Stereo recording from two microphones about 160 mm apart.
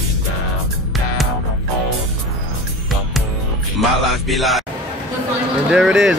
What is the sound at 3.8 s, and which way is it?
Speech, centre (ahead or behind).